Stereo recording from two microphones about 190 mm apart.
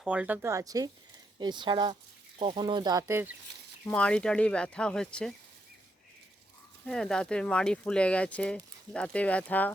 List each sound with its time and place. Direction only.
0.0 s speech: 5° right (ahead or behind)
3.8 s speech: 5° left (ahead or behind)
6.8 s speech: 5° left (ahead or behind)